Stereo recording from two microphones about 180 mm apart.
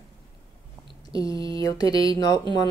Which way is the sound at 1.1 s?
20° left (ahead or behind).